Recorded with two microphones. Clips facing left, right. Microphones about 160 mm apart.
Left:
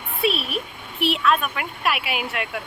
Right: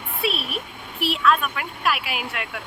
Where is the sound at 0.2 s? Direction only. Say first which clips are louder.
Left 4 dB; centre (ahead or behind).